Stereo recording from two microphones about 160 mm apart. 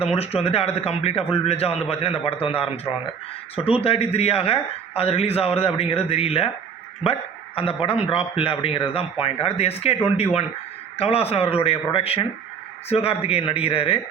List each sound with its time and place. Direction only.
0.0 s speech: 40° left (ahead or behind)
10.9 s speech: 40° left (ahead or behind)